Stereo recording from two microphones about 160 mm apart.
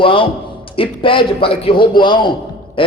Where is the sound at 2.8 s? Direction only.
30° left (ahead or behind).